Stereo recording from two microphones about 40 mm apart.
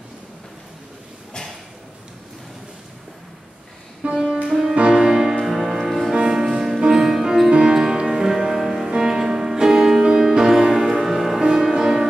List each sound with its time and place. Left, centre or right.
4.0 s music: right
4.5 s music: centre
4.7 s music: right